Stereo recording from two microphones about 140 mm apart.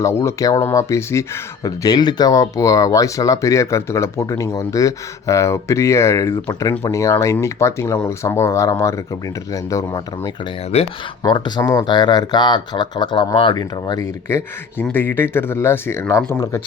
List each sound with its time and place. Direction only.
0.0 s speech: 20° left (ahead or behind)
10.7 s speech: 50° left (ahead or behind)
11.2 s speech: 30° left (ahead or behind)
14.3 s speech: 20° left (ahead or behind)